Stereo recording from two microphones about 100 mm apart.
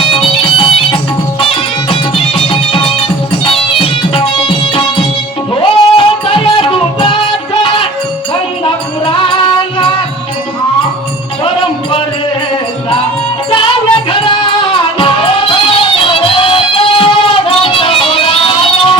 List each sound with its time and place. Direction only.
0.1 s music: 55° left (ahead or behind)
14.9 s music: 60° left (ahead or behind)